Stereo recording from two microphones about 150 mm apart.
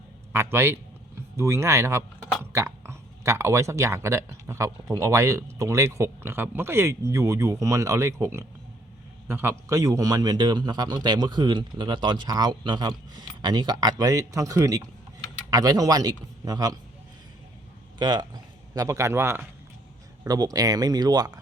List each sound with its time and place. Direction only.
0.3 s a man's voice: 15° right (ahead or behind)
18.0 s speech: 30° right (ahead or behind)